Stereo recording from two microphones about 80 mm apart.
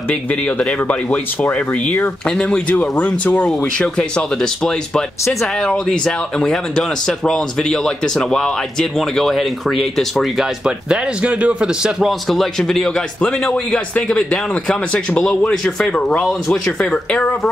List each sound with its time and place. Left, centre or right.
0.1 s speech: centre